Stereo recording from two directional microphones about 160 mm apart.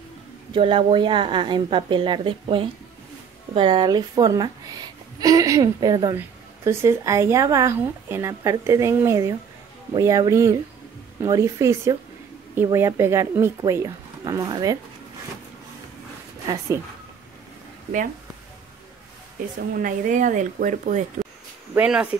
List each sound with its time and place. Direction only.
0.5 s a woman's voice: 35° right (ahead or behind)
19.8 s speech: 55° right (ahead or behind)
21.7 s speech: 5° right (ahead or behind)